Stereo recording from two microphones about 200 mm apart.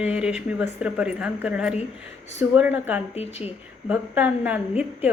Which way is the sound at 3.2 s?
30° left (ahead or behind).